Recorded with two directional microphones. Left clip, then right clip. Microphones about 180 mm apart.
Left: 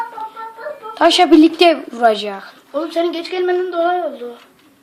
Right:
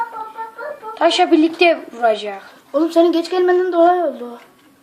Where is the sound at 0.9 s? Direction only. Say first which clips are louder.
Left 3 dB; 55° left (ahead or behind).